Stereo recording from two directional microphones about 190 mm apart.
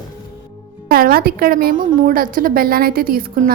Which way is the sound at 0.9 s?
50° right (ahead or behind).